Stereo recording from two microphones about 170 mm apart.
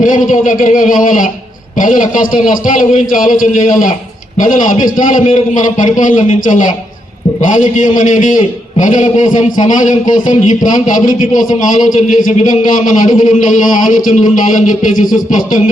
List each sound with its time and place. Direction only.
0.0 s a man's voice: 50° left (ahead or behind)